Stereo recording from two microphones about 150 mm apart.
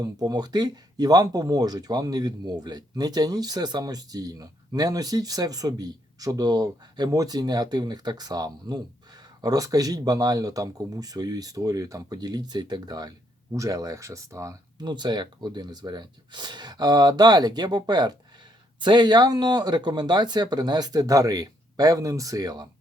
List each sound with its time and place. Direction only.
0.0 s speech: 25° right (ahead or behind)